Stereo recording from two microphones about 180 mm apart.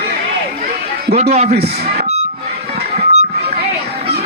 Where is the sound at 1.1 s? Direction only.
35° right (ahead or behind).